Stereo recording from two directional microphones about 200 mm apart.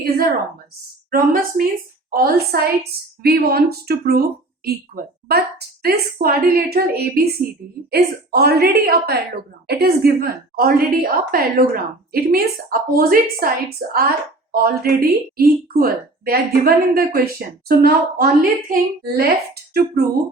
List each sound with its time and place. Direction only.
0.0 s speech: 50° right (ahead or behind)